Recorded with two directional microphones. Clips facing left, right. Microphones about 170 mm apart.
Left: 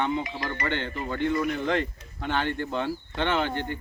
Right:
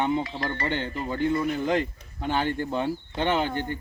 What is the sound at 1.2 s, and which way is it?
Speech, 25° right (ahead or behind).